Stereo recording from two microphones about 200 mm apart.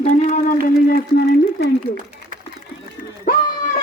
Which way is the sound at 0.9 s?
50° left (ahead or behind).